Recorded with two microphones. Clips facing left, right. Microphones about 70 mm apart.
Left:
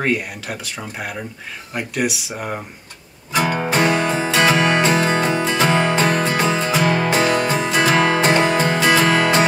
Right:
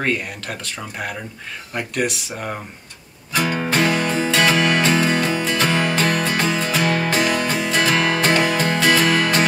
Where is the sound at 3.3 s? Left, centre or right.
Left.